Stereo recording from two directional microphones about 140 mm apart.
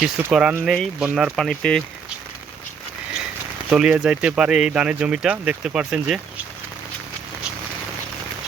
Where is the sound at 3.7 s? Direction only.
5° right (ahead or behind).